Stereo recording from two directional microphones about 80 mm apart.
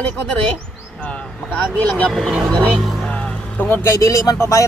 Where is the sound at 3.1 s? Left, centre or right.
Centre.